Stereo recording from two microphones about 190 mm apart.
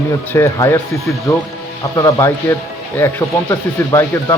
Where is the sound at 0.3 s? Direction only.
15° left (ahead or behind).